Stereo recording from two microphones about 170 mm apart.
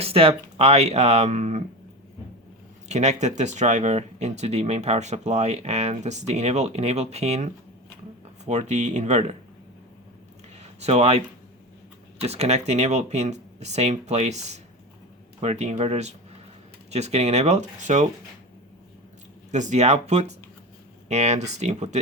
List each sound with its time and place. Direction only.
0.0 s speech: 35° right (ahead or behind)
2.9 s speech: 40° right (ahead or behind)
10.6 s a sound: 40° right (ahead or behind)
12.2 s speech: 40° right (ahead or behind)
19.5 s speech: 45° right (ahead or behind)